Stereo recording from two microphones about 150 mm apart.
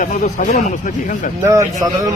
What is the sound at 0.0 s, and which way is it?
Speech, 65° left (ahead or behind).